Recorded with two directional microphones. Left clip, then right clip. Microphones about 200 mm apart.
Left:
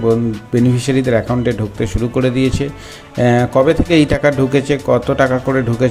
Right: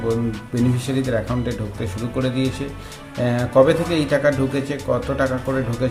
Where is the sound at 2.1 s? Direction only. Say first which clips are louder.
Left 6 dB; 30° left (ahead or behind).